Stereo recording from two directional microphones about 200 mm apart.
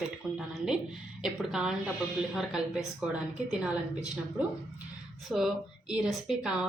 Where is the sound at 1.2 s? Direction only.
5° right (ahead or behind).